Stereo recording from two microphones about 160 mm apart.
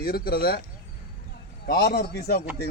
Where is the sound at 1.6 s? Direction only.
80° left.